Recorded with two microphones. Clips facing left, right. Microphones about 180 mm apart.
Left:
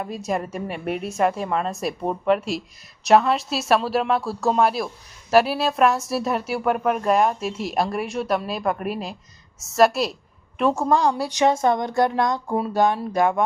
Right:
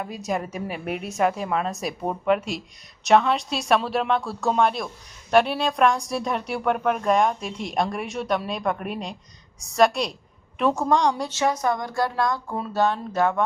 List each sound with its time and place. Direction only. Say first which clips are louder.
0.0 s a woman's voice: left 2 dB; centre (ahead or behind)
11.3 s speech: left 4 dB; 20° left (ahead or behind)